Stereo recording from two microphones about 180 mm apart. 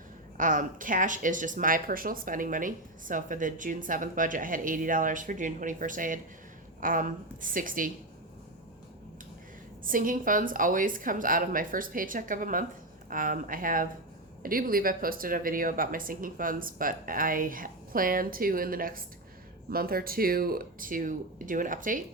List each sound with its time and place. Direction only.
0.3 s speech: 45° right (ahead or behind)
9.8 s speech: 50° right (ahead or behind)